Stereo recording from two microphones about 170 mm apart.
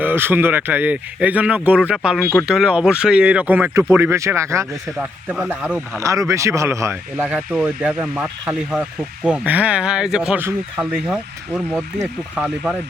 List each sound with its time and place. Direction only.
0.0 s speech: 10° right (ahead or behind)
4.9 s speech: 5° right (ahead or behind)